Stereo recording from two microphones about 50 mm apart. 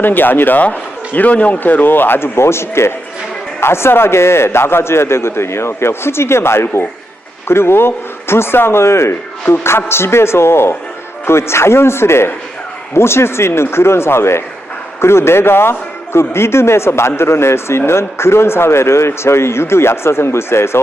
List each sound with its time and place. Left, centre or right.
0.0 s a man's voice: left